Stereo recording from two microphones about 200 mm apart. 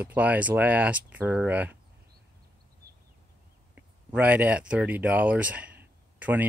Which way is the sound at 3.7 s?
5° right (ahead or behind).